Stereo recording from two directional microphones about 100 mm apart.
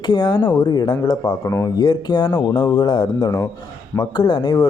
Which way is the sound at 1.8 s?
50° left (ahead or behind).